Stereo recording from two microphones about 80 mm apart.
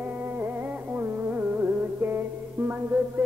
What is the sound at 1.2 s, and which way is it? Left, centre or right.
Music, right.